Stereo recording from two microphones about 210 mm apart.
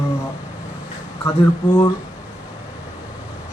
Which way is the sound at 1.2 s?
10° left (ahead or behind).